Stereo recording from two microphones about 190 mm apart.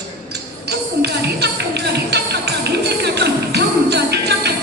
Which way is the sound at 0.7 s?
60° right (ahead or behind).